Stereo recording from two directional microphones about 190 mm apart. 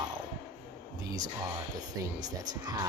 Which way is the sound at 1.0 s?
20° right (ahead or behind).